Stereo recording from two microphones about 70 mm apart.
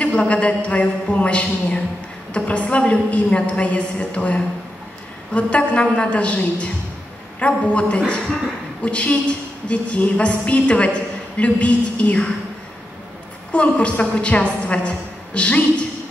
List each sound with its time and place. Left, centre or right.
0.0 s a woman's voice: centre
13.5 s a woman's voice: centre